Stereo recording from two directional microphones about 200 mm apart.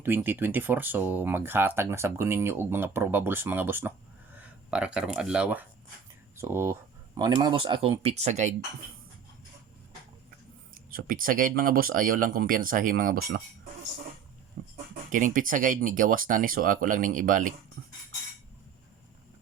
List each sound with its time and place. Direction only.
0.0 s speech: 10° right (ahead or behind); by 8.5 s 35° right (ahead or behind)
10.9 s speech: 45° right (ahead or behind)
15.1 s speech: 40° right (ahead or behind)